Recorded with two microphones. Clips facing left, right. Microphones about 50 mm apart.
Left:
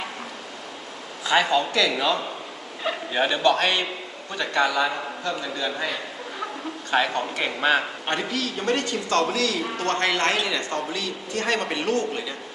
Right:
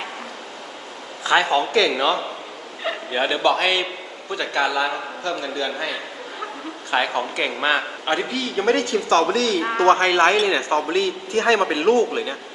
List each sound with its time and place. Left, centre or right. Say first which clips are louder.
1.3 s speech: right 3 dB; right
2.8 s a man's voice: right 1 dB; centre
6.9 s speech: right 2 dB; centre
8.9 s a man's voice: right 5 dB; right